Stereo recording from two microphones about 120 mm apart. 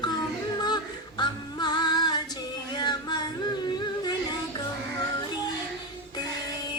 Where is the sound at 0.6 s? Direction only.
35° left (ahead or behind).